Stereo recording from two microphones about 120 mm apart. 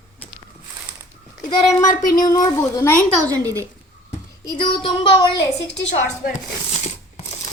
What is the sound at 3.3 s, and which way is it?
Speech, 25° right (ahead or behind).